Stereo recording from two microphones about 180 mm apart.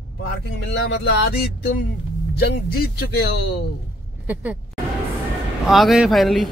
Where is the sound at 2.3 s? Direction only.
60° left (ahead or behind).